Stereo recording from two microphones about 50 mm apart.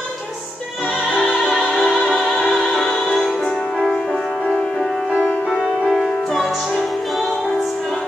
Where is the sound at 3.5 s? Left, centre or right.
Centre.